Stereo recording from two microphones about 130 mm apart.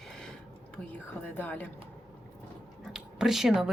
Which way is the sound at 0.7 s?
15° left (ahead or behind).